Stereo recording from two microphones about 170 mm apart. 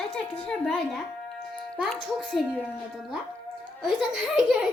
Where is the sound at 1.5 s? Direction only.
5° left (ahead or behind).